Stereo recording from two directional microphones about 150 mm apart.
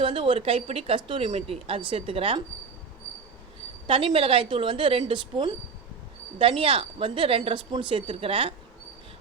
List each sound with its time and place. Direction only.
0.0 s speech: 35° right (ahead or behind)
3.8 s speech: 40° right (ahead or behind)